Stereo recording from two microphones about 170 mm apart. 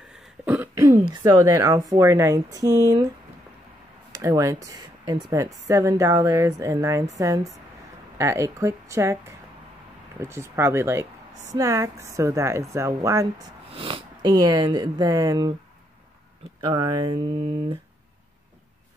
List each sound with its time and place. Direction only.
0.2 s throat clearing: 10° right (ahead or behind)
1.1 s speech: 25° right (ahead or behind)
1.4 s speech: 15° right (ahead or behind)
4.1 s speech: 20° right (ahead or behind)
13.7 s speech: 30° right (ahead or behind)
16.6 s speech: 25° right (ahead or behind)